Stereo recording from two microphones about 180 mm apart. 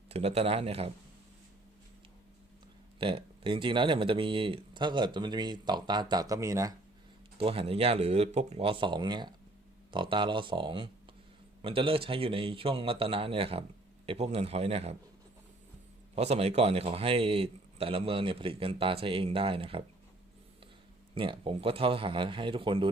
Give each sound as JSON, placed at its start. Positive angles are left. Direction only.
{"t": 0.1, "sound": "a man's voice", "side_deg": -35}
{"t": 3.0, "sound": "speech", "side_deg": -30}
{"t": 7.3, "sound": "a man's voice", "side_deg": -30}
{"t": 16.1, "sound": "a man's voice", "side_deg": -35}
{"t": 21.2, "sound": "speech", "side_deg": -30}